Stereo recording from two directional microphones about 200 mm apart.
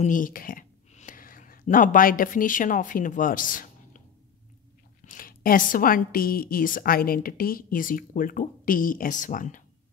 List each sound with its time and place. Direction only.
0.0 s speech: 40° left (ahead or behind)
5.0 s a woman's voice: 45° left (ahead or behind)